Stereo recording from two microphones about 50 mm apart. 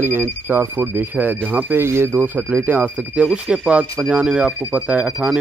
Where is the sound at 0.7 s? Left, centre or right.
Right.